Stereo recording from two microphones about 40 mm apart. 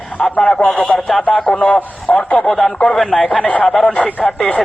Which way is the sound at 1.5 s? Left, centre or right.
Left.